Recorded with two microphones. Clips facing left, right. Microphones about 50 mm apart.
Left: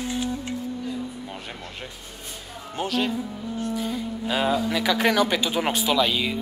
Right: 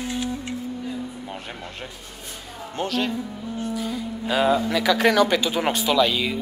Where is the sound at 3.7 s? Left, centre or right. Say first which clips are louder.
Even; left.